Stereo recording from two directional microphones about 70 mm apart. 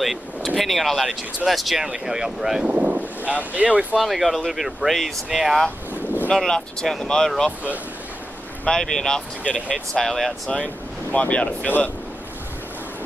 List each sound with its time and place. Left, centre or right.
0.0 s a sound: centre
0.6 s speech: centre
2.6 s speech: right
4.0 s speech: centre
6.3 s speech: centre
8.6 s speech: centre
10.5 s speech: centre